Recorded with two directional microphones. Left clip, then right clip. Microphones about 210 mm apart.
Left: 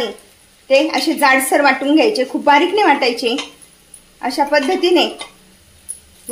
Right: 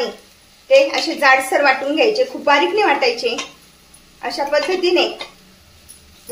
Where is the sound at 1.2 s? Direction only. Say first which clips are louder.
Even; 40° left (ahead or behind).